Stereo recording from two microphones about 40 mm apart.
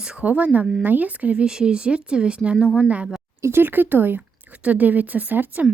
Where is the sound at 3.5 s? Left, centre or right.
Right.